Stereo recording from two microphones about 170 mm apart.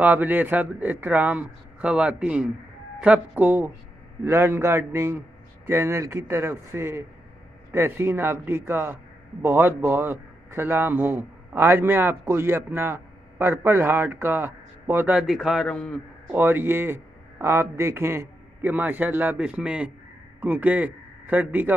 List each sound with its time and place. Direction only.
0.0 s a man's voice: 10° right (ahead or behind)
16.3 s a man's voice: 10° right (ahead or behind)